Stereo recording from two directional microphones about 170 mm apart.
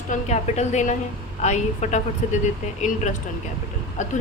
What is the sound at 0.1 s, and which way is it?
Speech, 40° left (ahead or behind).